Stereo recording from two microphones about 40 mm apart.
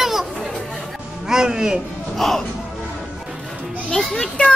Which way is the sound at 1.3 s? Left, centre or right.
Centre.